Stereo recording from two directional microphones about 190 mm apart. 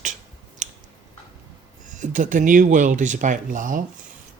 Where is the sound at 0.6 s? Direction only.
40° right (ahead or behind).